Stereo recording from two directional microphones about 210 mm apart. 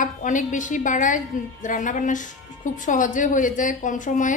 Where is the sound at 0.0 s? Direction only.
35° left (ahead or behind).